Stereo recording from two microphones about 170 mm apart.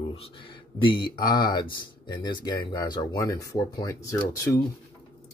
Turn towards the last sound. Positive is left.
turn(degrees=20)  # may be behind; listen again after turning